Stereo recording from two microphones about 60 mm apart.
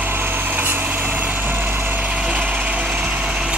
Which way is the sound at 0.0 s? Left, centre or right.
Right.